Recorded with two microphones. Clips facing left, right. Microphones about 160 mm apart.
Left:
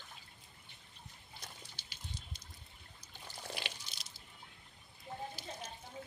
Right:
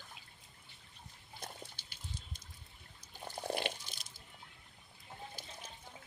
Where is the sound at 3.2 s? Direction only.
50° right (ahead or behind).